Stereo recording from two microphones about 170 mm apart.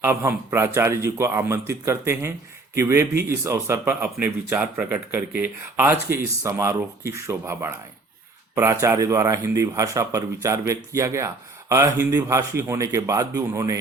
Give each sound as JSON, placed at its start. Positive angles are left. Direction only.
{"t": 0.0, "sound": "speech", "side_deg": -15}